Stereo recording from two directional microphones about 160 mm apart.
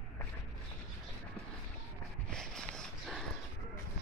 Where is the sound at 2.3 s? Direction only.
5° left (ahead or behind).